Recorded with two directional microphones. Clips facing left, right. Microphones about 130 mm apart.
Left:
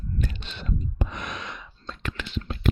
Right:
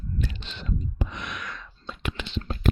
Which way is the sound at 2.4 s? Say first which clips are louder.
Even; 40° right (ahead or behind).